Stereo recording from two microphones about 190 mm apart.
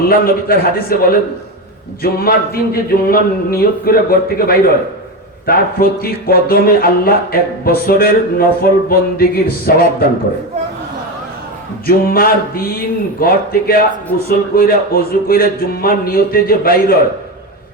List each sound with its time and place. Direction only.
0.0 s speech: 50° left (ahead or behind)
11.9 s speech: 50° left (ahead or behind)